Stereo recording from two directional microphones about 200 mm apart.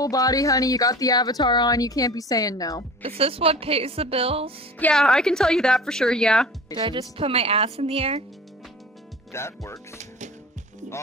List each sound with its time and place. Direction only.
0.0 s speech: 15° left (ahead or behind)
3.0 s a woman's voice: 30° right (ahead or behind)
4.7 s a woman's voice: 5° left (ahead or behind)
6.8 s a woman's voice: 20° right (ahead or behind)
9.3 s speech: 15° left (ahead or behind)